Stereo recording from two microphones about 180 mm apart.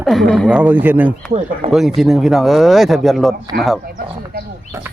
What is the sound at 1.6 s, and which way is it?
Speech, 30° right (ahead or behind).